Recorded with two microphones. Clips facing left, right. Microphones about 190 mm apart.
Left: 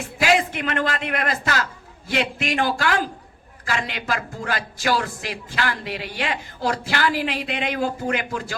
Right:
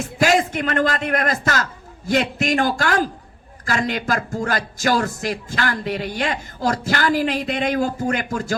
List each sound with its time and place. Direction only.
0.0 s a man's voice: 45° right (ahead or behind)